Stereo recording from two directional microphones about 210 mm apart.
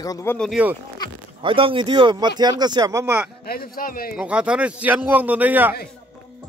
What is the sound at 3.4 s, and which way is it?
Speech, 45° left (ahead or behind).